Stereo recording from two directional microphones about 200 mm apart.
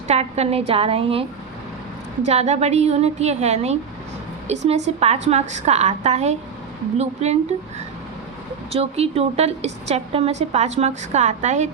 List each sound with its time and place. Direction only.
0.1 s a woman's voice: 30° right (ahead or behind)
2.2 s a woman's voice: 35° right (ahead or behind)
8.7 s a woman's voice: 30° right (ahead or behind)